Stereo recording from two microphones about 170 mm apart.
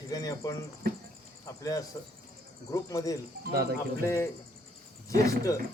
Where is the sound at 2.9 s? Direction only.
20° left (ahead or behind).